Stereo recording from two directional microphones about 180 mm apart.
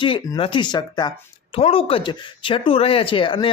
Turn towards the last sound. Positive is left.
turn(degrees=30)  # may be behind; listen again after turning